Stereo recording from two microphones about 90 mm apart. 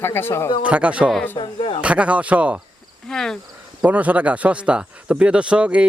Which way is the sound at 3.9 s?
15° right (ahead or behind).